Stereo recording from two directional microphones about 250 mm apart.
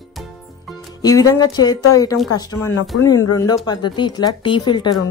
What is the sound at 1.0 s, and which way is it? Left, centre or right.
Speech, centre.